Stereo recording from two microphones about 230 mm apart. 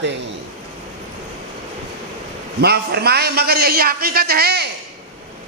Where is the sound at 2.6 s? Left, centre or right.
Right.